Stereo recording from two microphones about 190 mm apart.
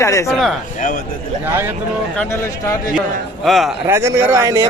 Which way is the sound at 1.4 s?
15° right (ahead or behind).